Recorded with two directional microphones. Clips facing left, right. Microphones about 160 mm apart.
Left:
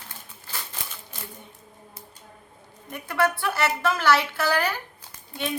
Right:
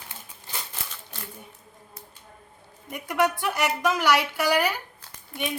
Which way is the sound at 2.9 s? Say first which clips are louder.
Even; 15° right (ahead or behind).